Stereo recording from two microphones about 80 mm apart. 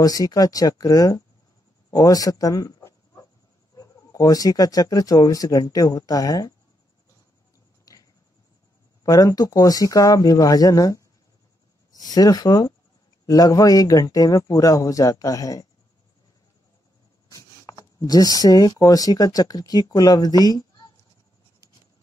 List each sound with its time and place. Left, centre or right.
0.0 s speech: left
1.9 s a sound: left
3.7 s speech: left
9.0 s speech: left
17.9 s speech: left